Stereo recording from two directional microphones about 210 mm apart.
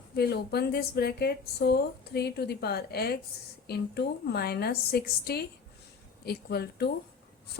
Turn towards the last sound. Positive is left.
turn(degrees=50)  # may be behind; listen again after turning